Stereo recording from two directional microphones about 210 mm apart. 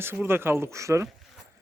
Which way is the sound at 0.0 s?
10° right (ahead or behind).